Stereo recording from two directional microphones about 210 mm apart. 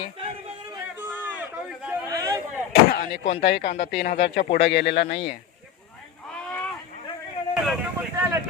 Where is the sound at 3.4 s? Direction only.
55° left (ahead or behind).